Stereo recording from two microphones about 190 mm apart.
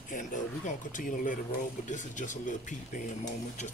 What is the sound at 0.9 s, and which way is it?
Speech, 45° left (ahead or behind).